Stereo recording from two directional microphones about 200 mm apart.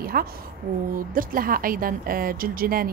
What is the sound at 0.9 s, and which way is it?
Speech, 45° right (ahead or behind).